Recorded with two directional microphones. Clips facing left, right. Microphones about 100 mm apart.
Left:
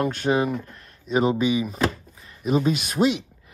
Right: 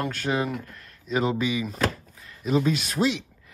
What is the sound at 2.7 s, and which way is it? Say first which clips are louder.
Speech: left 3 dB; 10° left (ahead or behind).